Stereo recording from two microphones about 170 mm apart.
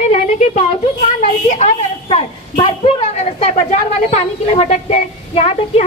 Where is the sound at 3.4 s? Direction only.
40° left (ahead or behind).